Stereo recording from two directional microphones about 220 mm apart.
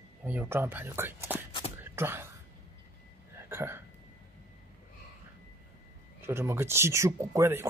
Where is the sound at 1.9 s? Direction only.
10° right (ahead or behind).